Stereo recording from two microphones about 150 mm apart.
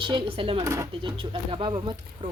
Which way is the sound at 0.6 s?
20° right (ahead or behind).